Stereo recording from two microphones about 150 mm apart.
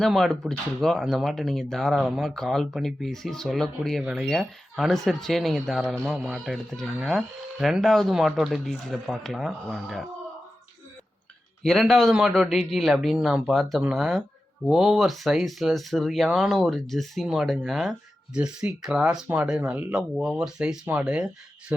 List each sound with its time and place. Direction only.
0.0 s speech: centre (ahead or behind)
11.6 s speech: centre (ahead or behind)